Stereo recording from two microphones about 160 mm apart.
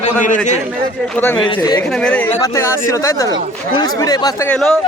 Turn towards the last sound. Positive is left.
turn(degrees=0)  # may be behind; listen again after turning